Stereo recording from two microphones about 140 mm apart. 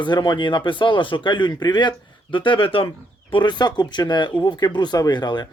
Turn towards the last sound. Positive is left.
turn(degrees=30)  # may be behind; listen again after turning